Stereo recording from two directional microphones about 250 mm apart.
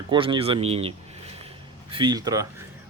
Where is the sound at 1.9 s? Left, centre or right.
Centre.